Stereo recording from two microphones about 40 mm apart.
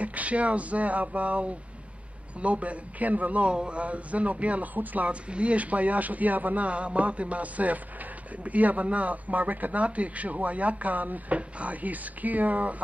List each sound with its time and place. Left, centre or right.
0.0 s speech: right
3.4 s speech: right
5.3 s speech: right